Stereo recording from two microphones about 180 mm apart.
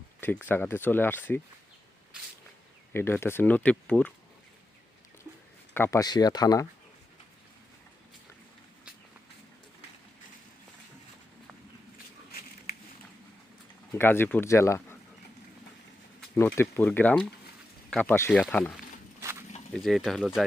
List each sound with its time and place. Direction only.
0.4 s speech: 10° left (ahead or behind)
2.9 s speech: 15° left (ahead or behind)
5.7 s speech: 15° left (ahead or behind)
13.9 s speech: 10° left (ahead or behind)
16.3 s speech: 10° left (ahead or behind)
19.2 s a sound: 15° right (ahead or behind)
19.7 s speech: centre (ahead or behind)